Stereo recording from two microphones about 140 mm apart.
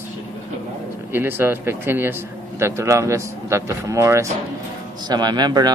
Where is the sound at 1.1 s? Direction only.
15° right (ahead or behind).